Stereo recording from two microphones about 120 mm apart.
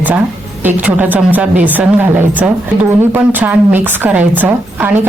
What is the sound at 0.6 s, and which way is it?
A woman's voice, 15° right (ahead or behind).